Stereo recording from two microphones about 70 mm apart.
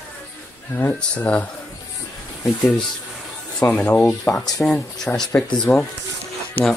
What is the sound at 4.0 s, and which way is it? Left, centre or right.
Speech, left.